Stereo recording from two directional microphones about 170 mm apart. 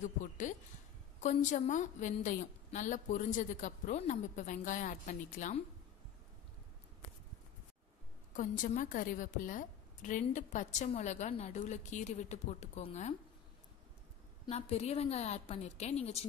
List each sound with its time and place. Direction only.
0.0 s a woman's voice: 45° left (ahead or behind)
8.3 s a woman's voice: 50° left (ahead or behind)
14.5 s a woman's voice: 40° left (ahead or behind)